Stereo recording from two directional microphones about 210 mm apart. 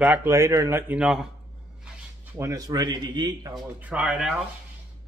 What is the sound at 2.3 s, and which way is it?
Speech, 15° right (ahead or behind).